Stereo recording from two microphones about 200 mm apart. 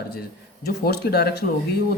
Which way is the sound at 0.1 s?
50° left (ahead or behind).